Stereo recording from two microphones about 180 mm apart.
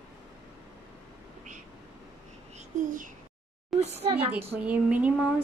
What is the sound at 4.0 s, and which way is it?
Speech, 35° right (ahead or behind).